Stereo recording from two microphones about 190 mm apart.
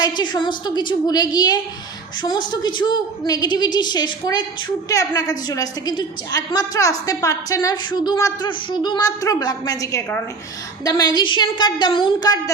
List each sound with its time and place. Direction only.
0.0 s a woman's voice: 25° left (ahead or behind)